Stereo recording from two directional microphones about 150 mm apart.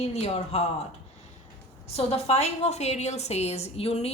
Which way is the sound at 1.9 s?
40° left (ahead or behind).